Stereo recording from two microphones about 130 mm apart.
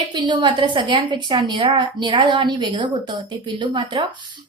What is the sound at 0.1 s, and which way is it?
A woman's voice, 35° right (ahead or behind).